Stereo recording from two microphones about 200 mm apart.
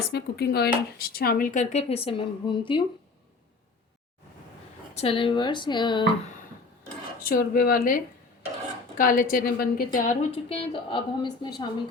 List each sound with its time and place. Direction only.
0.1 s speech: 50° left (ahead or behind); by 2.8 s 25° left (ahead or behind)
4.9 s a woman's voice: 25° left (ahead or behind)
7.2 s a woman's voice: 45° left (ahead or behind)
10.3 s a woman's voice: 25° left (ahead or behind)